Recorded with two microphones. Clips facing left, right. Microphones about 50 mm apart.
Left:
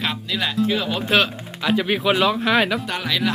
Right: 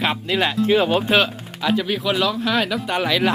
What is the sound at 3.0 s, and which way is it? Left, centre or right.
Speech, right.